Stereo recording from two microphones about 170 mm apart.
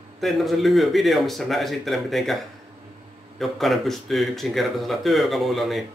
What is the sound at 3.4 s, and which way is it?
Speech, centre (ahead or behind).